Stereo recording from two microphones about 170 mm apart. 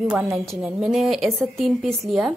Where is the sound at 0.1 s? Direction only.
10° right (ahead or behind).